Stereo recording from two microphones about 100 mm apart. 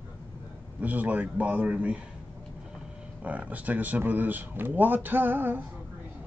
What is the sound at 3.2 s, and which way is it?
Speech, 15° right (ahead or behind).